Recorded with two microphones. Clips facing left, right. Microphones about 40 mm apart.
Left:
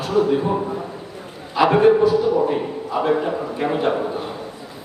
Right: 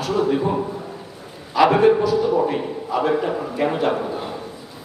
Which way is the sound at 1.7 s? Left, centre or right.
Centre.